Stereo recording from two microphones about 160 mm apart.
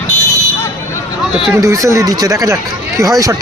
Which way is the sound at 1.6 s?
20° right (ahead or behind).